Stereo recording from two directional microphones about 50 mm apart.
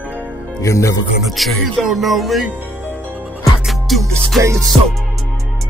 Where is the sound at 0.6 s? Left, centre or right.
Left.